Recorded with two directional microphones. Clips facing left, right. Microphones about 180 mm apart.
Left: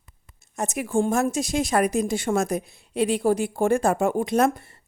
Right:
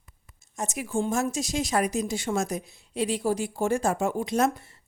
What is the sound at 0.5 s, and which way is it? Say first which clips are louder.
A woman's voice: left 5 dB; 60° left (ahead or behind).